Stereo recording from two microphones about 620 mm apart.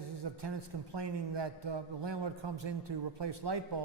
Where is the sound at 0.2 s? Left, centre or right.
Right.